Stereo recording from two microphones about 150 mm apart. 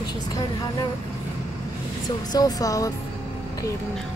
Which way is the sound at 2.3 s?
25° left (ahead or behind).